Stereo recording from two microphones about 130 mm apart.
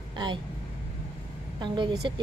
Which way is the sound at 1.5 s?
40° right (ahead or behind).